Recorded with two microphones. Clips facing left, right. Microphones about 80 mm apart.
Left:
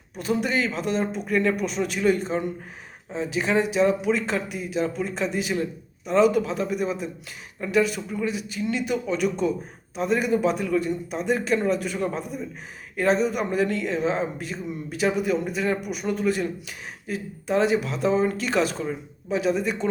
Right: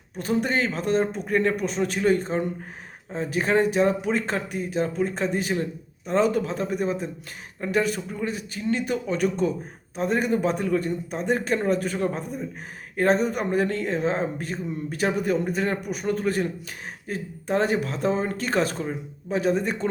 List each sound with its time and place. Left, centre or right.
0.2 s speech: right